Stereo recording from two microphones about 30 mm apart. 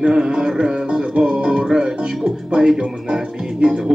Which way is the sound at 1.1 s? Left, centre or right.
Right.